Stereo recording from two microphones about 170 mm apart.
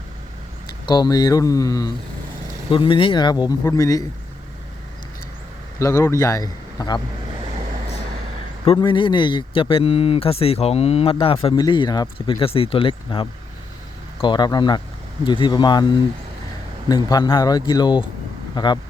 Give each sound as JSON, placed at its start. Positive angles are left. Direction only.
{"t": 0.7, "sound": "speech", "side_deg": 25}
{"t": 2.6, "sound": "speech", "side_deg": 30}
{"t": 5.8, "sound": "speech", "side_deg": 20}
{"t": 8.6, "sound": "speech", "side_deg": 30}